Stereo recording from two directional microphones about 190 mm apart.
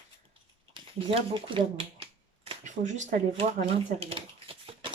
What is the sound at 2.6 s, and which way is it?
Speech, 40° right (ahead or behind).